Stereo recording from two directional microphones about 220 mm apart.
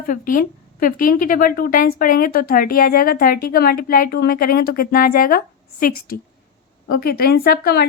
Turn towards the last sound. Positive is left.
turn(degrees=45)  # may be behind; listen again after turning